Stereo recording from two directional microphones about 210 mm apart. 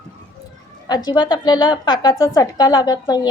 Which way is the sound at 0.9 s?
20° left (ahead or behind).